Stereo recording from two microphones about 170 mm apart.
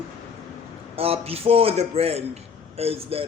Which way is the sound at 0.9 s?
35° right (ahead or behind).